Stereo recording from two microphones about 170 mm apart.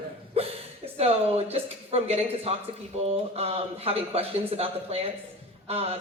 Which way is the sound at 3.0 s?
35° right (ahead or behind).